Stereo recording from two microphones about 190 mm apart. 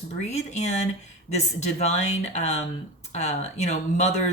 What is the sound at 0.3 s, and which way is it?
Speech, 35° left (ahead or behind).